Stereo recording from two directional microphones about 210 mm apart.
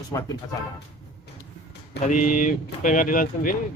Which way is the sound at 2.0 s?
35° left (ahead or behind).